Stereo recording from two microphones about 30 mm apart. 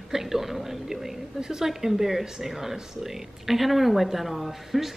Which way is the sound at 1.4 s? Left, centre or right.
Right.